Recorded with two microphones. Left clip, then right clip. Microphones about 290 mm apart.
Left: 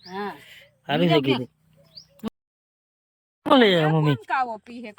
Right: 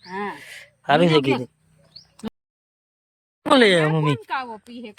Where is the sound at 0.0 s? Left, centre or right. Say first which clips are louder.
Right 3 dB; centre.